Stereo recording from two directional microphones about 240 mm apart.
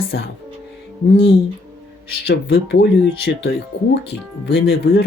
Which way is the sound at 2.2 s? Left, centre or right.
Left.